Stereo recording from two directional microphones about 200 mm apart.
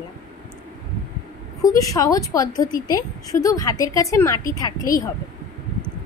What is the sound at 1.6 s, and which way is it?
A woman's voice, 15° left (ahead or behind).